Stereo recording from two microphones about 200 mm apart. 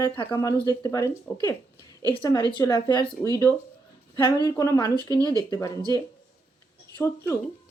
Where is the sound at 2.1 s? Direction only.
20° left (ahead or behind).